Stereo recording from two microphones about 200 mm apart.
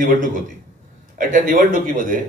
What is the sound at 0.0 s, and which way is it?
A man's voice, 40° right (ahead or behind).